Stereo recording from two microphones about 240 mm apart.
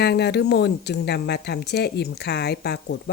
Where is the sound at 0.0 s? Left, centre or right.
Left.